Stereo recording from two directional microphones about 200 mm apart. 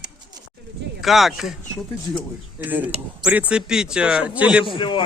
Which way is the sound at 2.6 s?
10° right (ahead or behind).